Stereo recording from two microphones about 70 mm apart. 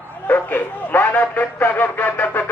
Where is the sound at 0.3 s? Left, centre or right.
Left.